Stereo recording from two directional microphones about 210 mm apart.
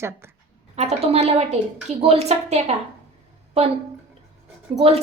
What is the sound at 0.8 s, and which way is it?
A woman's voice, 30° right (ahead or behind).